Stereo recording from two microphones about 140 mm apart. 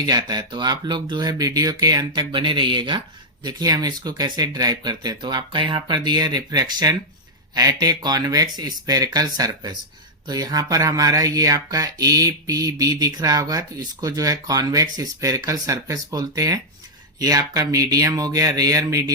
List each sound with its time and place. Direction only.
0.0 s speech: 30° right (ahead or behind)